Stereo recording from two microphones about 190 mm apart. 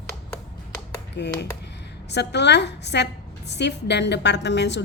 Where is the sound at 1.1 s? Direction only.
65° left (ahead or behind).